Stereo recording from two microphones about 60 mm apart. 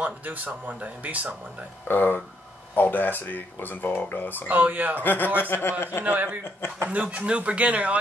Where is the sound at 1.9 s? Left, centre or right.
Left.